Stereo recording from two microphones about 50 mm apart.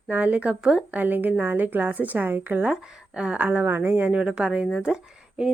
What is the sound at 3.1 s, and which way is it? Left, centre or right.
Speech, centre.